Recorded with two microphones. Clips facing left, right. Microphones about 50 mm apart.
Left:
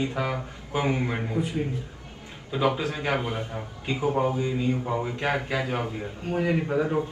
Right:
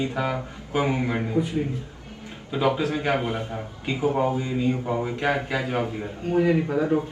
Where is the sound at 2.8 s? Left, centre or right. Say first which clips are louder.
Right 3 dB; right.